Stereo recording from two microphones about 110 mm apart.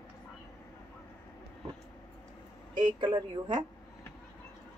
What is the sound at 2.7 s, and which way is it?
Speech, 45° right (ahead or behind).